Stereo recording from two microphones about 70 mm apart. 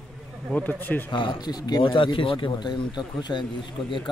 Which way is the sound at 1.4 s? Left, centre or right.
Left.